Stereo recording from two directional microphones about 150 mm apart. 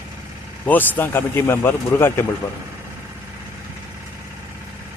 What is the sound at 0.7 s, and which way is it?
A man's voice, 10° left (ahead or behind).